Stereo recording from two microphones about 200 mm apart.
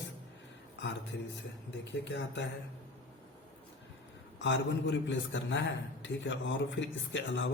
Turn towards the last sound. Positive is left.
turn(degrees=65)  # may be behind; listen again after turning